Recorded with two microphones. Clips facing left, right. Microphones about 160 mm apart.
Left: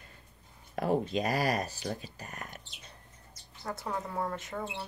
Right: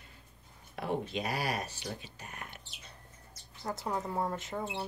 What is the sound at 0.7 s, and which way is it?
Speech, 40° left (ahead or behind).